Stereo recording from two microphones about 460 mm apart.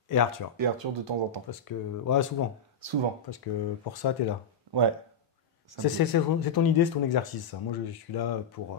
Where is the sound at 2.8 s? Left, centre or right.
Right.